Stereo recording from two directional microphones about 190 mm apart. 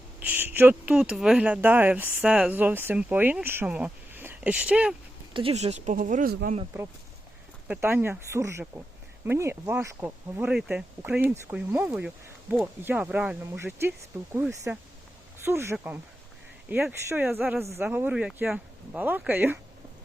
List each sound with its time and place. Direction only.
0.2 s speech: 10° right (ahead or behind)
5.3 s speech: 30° right (ahead or behind); by 6.6 s 45° right (ahead or behind)
7.7 s speech: 10° right (ahead or behind)